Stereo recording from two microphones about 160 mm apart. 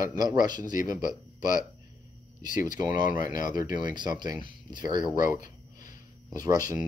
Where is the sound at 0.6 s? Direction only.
55° left (ahead or behind).